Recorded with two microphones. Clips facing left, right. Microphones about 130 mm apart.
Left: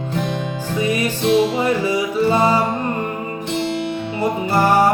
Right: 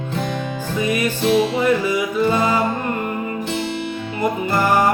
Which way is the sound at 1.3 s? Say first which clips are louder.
Left 1 dB; 30° left (ahead or behind).